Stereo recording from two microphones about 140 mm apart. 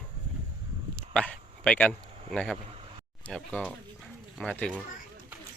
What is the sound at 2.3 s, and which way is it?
Speech, 5° left (ahead or behind).